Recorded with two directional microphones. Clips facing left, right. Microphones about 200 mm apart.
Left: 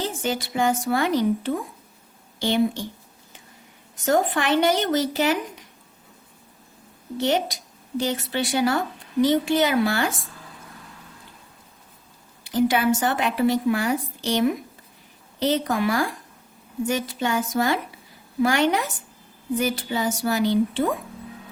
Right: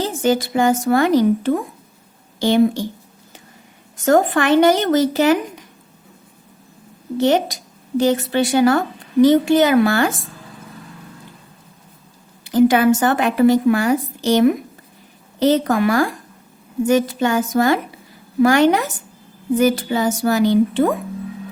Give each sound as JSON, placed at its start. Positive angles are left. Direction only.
{"t": 0.0, "sound": "a woman's voice", "side_deg": -40}
{"t": 4.0, "sound": "speech", "side_deg": -50}
{"t": 7.2, "sound": "speech", "side_deg": -45}
{"t": 12.5, "sound": "speech", "side_deg": -50}